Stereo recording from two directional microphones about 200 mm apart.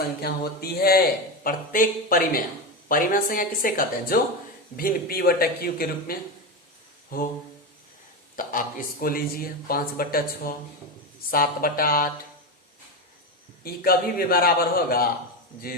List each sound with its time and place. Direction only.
0.2 s speech: 50° left (ahead or behind)
8.4 s speech: 45° left (ahead or behind)
13.7 s speech: 50° left (ahead or behind)